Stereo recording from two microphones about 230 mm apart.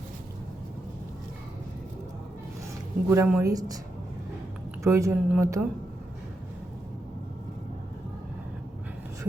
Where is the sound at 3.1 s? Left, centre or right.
Centre.